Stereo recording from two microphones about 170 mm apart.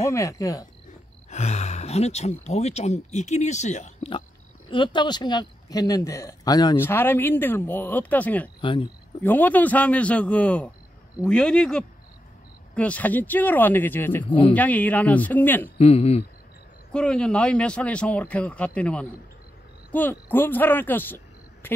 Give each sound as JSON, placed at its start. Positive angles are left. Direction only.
{"t": 0.0, "sound": "speech", "side_deg": 20}
{"t": 1.3, "sound": "speech", "side_deg": 40}
{"t": 6.8, "sound": "speech", "side_deg": 15}
{"t": 8.5, "sound": "speech", "side_deg": 30}
{"t": 9.2, "sound": "speech", "side_deg": 10}
{"t": 15.8, "sound": "speech", "side_deg": 35}
{"t": 16.9, "sound": "speech", "side_deg": 5}
{"t": 21.6, "sound": "a sound", "side_deg": 10}